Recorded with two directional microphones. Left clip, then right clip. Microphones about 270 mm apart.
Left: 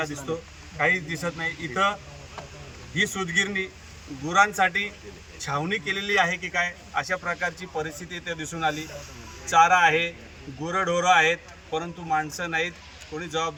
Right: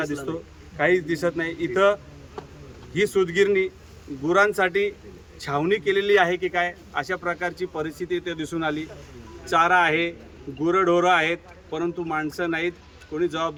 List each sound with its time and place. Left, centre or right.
0.8 s a man's voice: centre